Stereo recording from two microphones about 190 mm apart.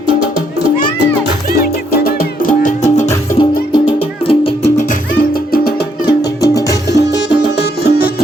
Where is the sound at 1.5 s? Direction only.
50° left (ahead or behind).